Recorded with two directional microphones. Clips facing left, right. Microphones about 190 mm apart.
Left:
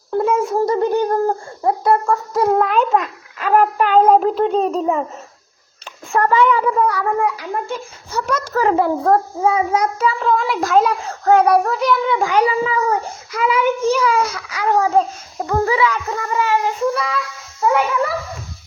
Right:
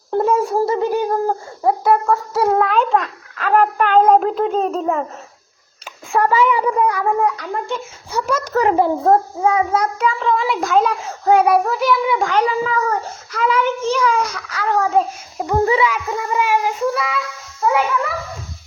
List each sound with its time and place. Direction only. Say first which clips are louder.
0.5 s a child's voice: left 1 dB; 5° right (ahead or behind)
6.1 s a child's voice: left 1 dB; 5° right (ahead or behind)
7.4 s a child's voice: even; centre (ahead or behind)
8.5 s a child's voice: right 1 dB; 20° right (ahead or behind)
9.4 s a child's voice: even; 10° left (ahead or behind)
11.1 s a child's voice: even; 10° right (ahead or behind)
11.5 s a child's voice: even; centre (ahead or behind)
12.2 s a child's voice: left 1 dB; 10° left (ahead or behind)
14.8 s a child's voice: left 1 dB; 5° right (ahead or behind)
15.4 s a child's voice: right 1 dB; 20° right (ahead or behind); by 17.8 s 10° left (ahead or behind)